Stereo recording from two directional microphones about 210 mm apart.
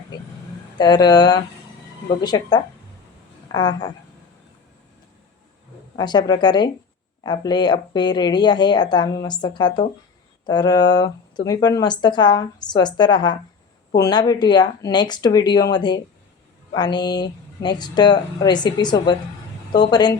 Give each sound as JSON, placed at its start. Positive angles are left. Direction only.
{"t": 0.8, "sound": "speech", "side_deg": 20}
{"t": 6.0, "sound": "speech", "side_deg": 20}